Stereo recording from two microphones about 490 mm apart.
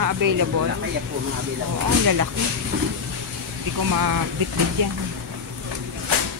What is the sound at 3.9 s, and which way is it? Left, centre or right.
Speech, right.